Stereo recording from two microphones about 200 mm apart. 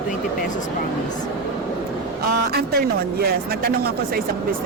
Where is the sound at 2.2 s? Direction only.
50° right (ahead or behind).